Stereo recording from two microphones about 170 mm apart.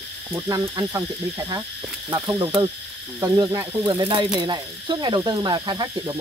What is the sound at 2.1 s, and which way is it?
Speech, 25° right (ahead or behind).